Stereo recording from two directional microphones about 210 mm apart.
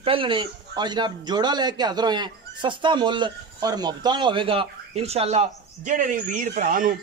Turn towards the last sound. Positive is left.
turn(degrees=-40)  # may be behind; listen again after turning